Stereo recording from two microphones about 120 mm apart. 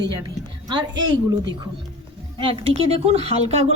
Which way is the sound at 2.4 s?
55° right (ahead or behind).